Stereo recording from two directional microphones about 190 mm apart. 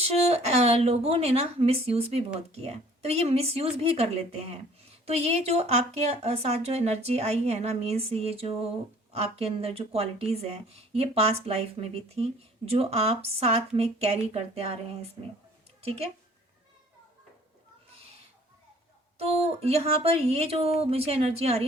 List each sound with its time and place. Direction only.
0.0 s speech: 35° right (ahead or behind)
19.2 s speech: 35° right (ahead or behind)